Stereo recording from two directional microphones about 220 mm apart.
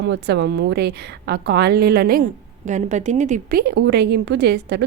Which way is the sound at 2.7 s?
35° right (ahead or behind).